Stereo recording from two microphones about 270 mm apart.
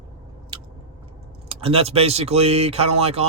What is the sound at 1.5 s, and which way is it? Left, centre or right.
Speech, right.